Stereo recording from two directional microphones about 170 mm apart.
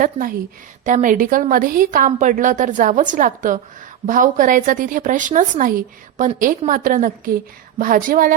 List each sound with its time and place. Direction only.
0.0 s a woman's voice: 55° right (ahead or behind)